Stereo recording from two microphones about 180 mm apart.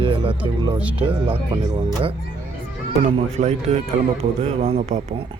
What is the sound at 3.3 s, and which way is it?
Speech, 40° right (ahead or behind).